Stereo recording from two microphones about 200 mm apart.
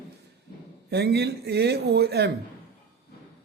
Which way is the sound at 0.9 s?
55° right (ahead or behind).